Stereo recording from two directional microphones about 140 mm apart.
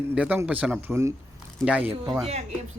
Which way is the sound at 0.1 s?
10° right (ahead or behind).